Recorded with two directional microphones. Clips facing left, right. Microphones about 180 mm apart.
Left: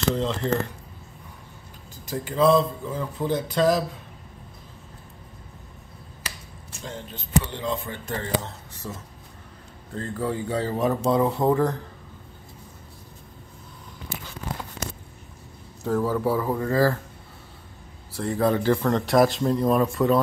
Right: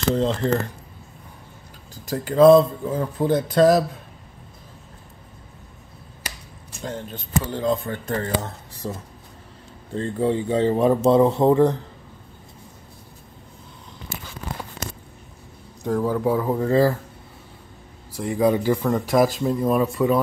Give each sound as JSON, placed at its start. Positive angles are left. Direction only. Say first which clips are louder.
{"t": 0.1, "sound": "speech", "louder": "right 6 dB", "side_deg": -40}
{"t": 2.0, "sound": "speech", "louder": "right 7 dB", "side_deg": -40}
{"t": 7.5, "sound": "speech", "louder": "right 6 dB", "side_deg": -40}
{"t": 15.8, "sound": "speech", "louder": "right 2 dB", "side_deg": -15}
{"t": 18.1, "sound": "speech", "louder": "right 3 dB", "side_deg": -15}